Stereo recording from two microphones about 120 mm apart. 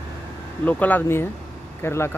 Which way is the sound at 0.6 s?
15° left (ahead or behind).